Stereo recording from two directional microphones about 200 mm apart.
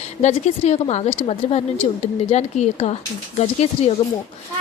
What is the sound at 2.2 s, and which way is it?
A woman's voice, 35° left (ahead or behind).